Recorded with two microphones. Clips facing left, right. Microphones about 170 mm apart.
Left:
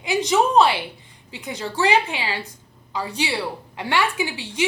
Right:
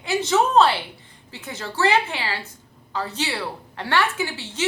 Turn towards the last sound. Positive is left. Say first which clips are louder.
# left 2 dB
turn(degrees=15)  # may be behind; listen again after turning